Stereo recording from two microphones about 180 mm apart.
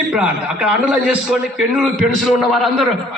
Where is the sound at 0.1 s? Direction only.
5° right (ahead or behind).